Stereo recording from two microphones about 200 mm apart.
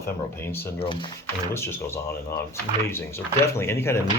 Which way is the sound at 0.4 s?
10° left (ahead or behind).